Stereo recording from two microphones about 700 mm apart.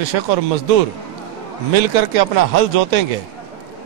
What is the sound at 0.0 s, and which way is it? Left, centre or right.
Speech, right.